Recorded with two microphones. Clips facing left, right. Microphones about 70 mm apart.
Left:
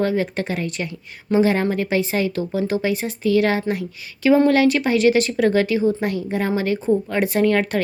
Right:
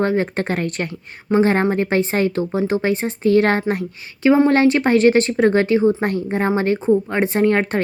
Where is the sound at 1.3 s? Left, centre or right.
Right.